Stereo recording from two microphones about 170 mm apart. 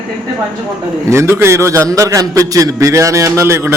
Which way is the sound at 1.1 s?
15° right (ahead or behind).